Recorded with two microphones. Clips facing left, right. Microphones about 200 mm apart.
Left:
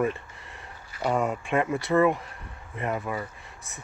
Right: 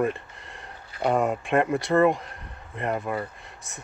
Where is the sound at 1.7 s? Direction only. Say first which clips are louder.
Even; 5° left (ahead or behind).